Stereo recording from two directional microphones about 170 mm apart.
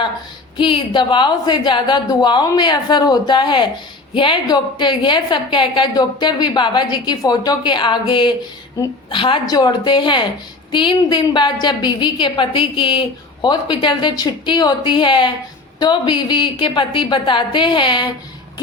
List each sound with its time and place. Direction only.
0.5 s a woman's voice: 30° left (ahead or behind)